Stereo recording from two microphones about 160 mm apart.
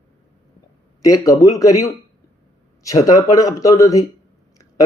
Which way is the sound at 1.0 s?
20° left (ahead or behind).